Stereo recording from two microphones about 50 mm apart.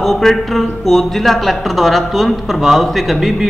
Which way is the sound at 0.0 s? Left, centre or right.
Centre.